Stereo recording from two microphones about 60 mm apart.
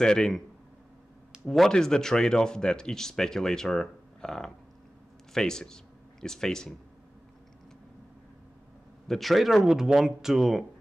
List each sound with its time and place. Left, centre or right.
0.0 s speech: centre
1.4 s speech: centre
9.0 s a man's voice: centre